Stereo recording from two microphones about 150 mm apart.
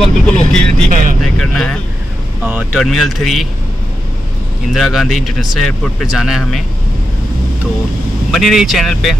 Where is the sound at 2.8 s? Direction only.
Centre (ahead or behind).